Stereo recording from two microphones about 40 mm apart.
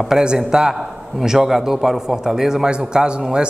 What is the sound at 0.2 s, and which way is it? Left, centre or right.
A man's voice, centre.